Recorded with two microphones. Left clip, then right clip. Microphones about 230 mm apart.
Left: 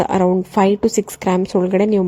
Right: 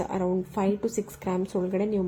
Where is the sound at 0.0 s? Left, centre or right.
Left.